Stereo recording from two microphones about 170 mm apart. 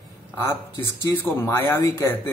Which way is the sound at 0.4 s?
15° left (ahead or behind).